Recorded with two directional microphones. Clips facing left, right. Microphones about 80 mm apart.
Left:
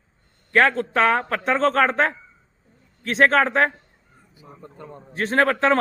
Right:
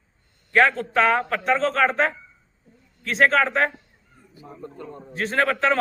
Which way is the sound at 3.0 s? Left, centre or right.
Left.